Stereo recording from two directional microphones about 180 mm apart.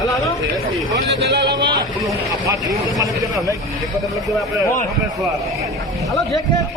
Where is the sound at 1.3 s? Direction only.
65° right (ahead or behind).